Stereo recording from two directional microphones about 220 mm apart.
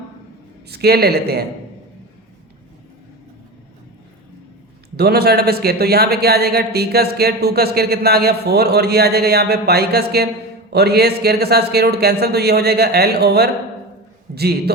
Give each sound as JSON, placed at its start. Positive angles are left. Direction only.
{"t": 0.7, "sound": "speech", "side_deg": -45}
{"t": 4.9, "sound": "speech", "side_deg": -45}